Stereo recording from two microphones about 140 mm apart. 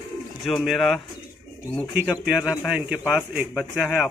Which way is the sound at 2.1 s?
5° right (ahead or behind).